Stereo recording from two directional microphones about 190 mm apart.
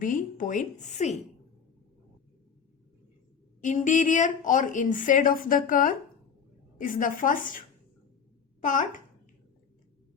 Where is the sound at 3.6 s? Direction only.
40° left (ahead or behind).